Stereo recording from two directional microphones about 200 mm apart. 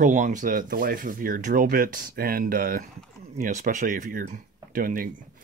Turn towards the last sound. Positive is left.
turn(degrees=-45)  # may be behind; listen again after turning